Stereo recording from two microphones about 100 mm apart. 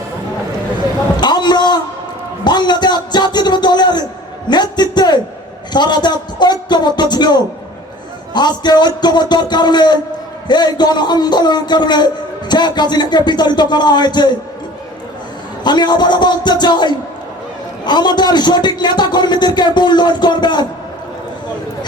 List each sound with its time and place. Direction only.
1.1 s a sound: 45° left (ahead or behind)
8.3 s a man's voice: 45° left (ahead or behind)
15.6 s a man's voice: 45° left (ahead or behind)